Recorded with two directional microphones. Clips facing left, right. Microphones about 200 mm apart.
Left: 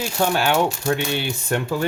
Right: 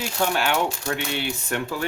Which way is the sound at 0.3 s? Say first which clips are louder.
Left 4 dB; 35° left (ahead or behind).